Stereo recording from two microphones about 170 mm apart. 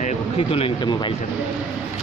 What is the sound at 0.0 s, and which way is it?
Speech, 35° left (ahead or behind).